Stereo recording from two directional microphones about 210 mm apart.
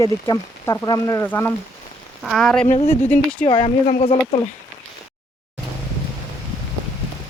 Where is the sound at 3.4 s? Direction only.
25° left (ahead or behind).